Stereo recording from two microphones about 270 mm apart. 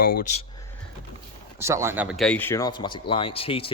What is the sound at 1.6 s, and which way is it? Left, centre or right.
A man's voice, centre.